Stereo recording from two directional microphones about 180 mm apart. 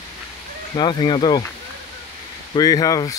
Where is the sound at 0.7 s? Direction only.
25° left (ahead or behind).